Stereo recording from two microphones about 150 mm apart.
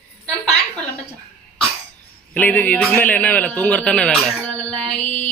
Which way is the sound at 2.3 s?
10° left (ahead or behind).